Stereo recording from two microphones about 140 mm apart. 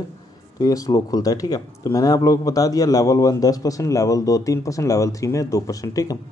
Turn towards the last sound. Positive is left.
turn(degrees=25)  # may be behind; listen again after turning